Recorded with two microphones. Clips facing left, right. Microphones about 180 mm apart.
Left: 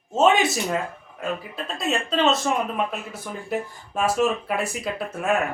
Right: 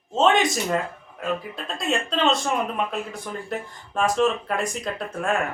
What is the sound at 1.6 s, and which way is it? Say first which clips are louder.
Speech: even; centre (ahead or behind).